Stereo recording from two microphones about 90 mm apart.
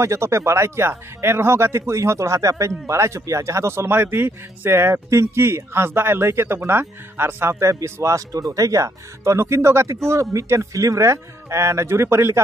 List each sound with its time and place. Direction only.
0.0 s speech: 30° right (ahead or behind)